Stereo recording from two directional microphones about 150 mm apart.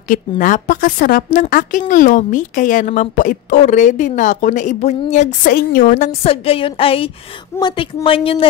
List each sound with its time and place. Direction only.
0.1 s a woman's voice: 60° left (ahead or behind)
5.5 s a woman's voice: 75° left (ahead or behind); by 8.5 s 40° left (ahead or behind)